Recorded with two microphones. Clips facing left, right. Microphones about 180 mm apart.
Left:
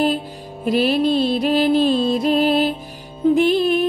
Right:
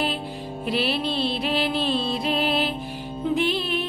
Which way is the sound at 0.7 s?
45° left (ahead or behind).